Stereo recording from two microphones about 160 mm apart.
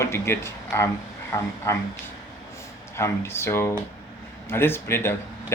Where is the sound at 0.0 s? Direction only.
15° left (ahead or behind).